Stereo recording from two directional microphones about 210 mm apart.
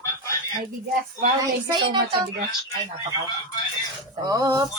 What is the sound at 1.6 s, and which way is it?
Speech, 20° right (ahead or behind).